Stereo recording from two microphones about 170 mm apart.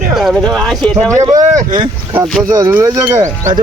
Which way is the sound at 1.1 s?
20° right (ahead or behind).